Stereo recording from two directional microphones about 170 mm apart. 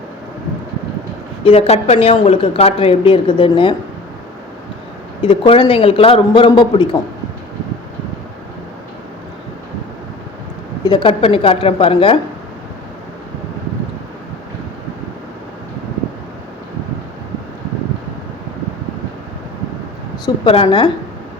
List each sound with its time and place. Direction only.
1.5 s a woman's voice: 35° left (ahead or behind)
5.2 s a woman's voice: 30° left (ahead or behind)
10.8 s a woman's voice: 30° left (ahead or behind)
20.2 s a woman's voice: 30° left (ahead or behind)